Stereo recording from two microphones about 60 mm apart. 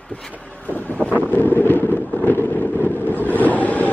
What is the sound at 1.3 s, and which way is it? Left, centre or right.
Wind noise, left.